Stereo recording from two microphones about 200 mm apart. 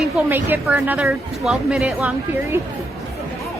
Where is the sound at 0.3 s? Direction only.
10° right (ahead or behind).